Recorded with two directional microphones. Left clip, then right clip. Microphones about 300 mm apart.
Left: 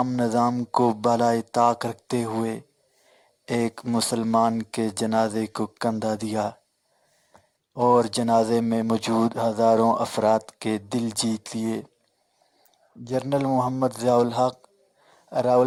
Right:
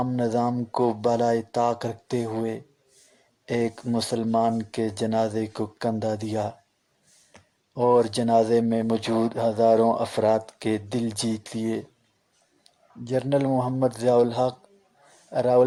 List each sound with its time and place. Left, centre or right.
0.0 s speech: left
7.7 s speech: left
13.1 s speech: left